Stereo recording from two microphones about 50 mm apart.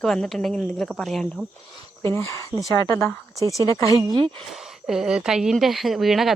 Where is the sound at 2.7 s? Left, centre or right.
Left.